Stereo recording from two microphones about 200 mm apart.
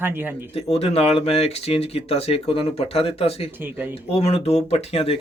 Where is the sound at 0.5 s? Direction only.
30° left (ahead or behind).